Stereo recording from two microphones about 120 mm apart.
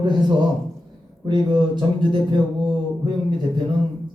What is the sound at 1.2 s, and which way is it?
Speech, 40° right (ahead or behind).